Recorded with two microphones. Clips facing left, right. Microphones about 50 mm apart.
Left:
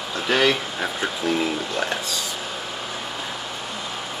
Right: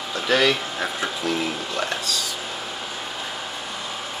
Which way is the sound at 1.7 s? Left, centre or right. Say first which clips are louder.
Left 1 dB; centre.